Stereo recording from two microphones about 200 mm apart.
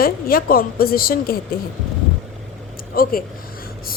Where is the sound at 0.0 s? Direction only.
45° left (ahead or behind).